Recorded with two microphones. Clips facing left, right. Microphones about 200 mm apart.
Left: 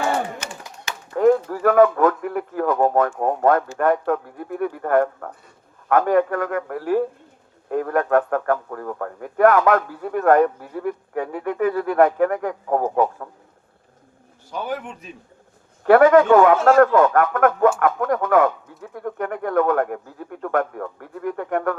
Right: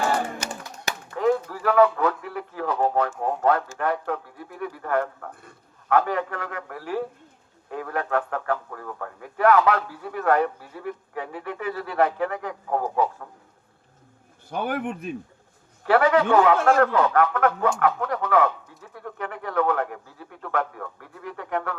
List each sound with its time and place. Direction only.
0.3 s a sound: 35° right (ahead or behind)
1.1 s a man's voice: 50° left (ahead or behind)
14.5 s speech: 55° right (ahead or behind)
15.8 s a man's voice: 50° left (ahead or behind)